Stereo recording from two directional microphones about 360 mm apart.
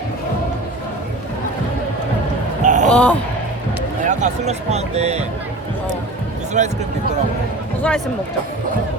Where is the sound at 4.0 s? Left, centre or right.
Centre.